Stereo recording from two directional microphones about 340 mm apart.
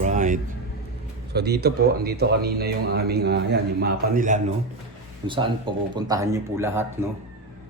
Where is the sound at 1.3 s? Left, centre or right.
Right; by 7.1 s centre.